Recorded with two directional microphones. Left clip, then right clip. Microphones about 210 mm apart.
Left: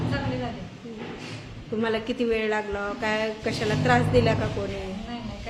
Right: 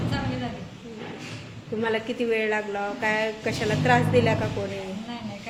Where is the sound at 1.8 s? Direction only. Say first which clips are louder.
Even; 5° left (ahead or behind).